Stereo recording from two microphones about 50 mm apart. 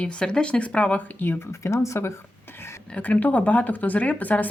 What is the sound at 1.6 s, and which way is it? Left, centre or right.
Speech, left.